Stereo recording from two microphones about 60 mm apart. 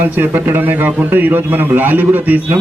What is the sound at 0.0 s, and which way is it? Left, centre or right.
A man's voice, right.